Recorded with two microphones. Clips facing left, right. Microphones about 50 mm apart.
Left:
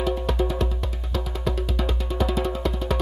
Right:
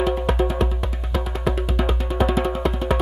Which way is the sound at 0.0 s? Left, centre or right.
Right.